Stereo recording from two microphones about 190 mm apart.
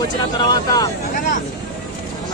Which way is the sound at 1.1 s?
40° left (ahead or behind).